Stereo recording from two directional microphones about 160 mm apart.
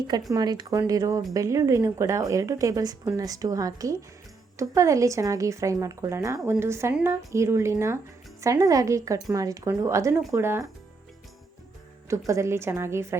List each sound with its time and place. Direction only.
0.3 s a woman's voice: 25° right (ahead or behind)
12.0 s a woman's voice: 20° right (ahead or behind)